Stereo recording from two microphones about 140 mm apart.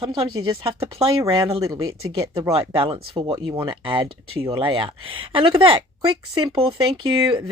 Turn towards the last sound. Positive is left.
turn(degrees=-40)  # may be behind; listen again after turning